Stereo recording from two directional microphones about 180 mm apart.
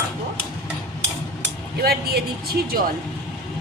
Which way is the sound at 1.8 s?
60° right (ahead or behind).